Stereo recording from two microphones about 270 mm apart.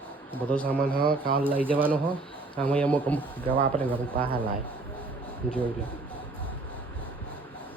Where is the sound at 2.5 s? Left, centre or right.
Centre.